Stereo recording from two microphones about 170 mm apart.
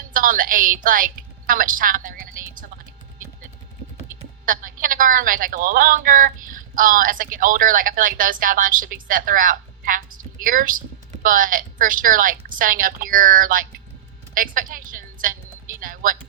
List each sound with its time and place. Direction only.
0.1 s a woman's voice: 55° right (ahead or behind)
4.4 s a woman's voice: 55° right (ahead or behind)